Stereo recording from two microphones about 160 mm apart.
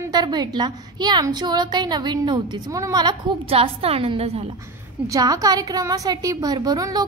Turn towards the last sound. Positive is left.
turn(degrees=-25)  # may be behind; listen again after turning